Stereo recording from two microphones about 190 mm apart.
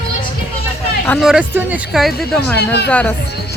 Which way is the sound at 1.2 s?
5° right (ahead or behind).